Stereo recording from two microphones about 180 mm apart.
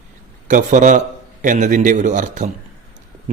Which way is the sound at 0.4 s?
45° right (ahead or behind).